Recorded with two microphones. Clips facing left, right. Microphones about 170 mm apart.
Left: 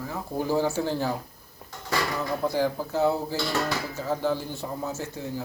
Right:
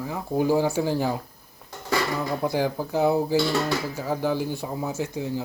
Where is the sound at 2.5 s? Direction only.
15° right (ahead or behind).